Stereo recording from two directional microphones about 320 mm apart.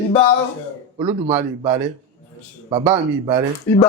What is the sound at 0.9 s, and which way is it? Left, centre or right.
Speech, centre.